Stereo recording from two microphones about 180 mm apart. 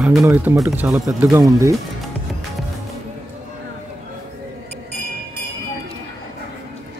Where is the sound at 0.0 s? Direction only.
Centre (ahead or behind); by 1.8 s 15° right (ahead or behind).